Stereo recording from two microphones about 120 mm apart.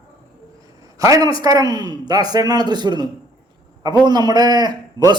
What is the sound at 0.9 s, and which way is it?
A man's voice, 30° right (ahead or behind).